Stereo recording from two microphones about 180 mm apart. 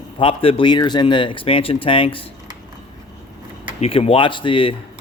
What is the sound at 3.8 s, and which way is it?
Speech, 35° left (ahead or behind).